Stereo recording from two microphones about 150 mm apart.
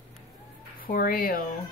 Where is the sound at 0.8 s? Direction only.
70° left (ahead or behind).